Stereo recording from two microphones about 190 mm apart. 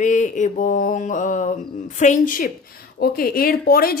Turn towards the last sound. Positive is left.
turn(degrees=50)  # may be behind; listen again after turning